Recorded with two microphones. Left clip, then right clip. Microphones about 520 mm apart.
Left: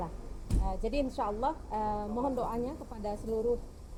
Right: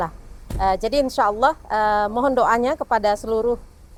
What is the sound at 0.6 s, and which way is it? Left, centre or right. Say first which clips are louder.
A woman's voice: right 15 dB; right.